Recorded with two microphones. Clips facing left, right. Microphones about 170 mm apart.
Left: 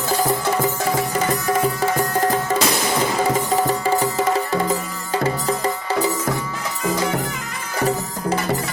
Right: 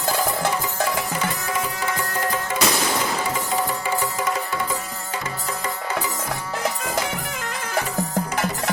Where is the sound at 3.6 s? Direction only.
35° left (ahead or behind).